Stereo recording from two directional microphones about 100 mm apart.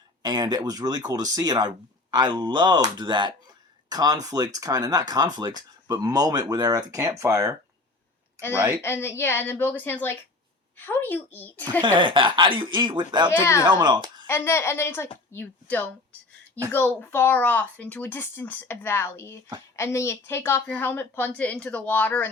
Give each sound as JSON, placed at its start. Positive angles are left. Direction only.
{"t": 0.2, "sound": "speech", "side_deg": -45}
{"t": 8.8, "sound": "speech", "side_deg": 25}
{"t": 11.8, "sound": "speech", "side_deg": -55}
{"t": 13.4, "sound": "speech", "side_deg": 30}
{"t": 13.7, "sound": "speech", "side_deg": -45}
{"t": 14.3, "sound": "speech", "side_deg": 25}